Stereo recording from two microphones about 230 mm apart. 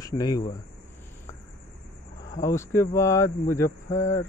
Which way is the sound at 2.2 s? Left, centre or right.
Centre.